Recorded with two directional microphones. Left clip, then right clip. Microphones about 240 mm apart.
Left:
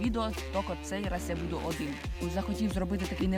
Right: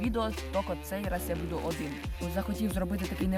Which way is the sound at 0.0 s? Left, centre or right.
Centre.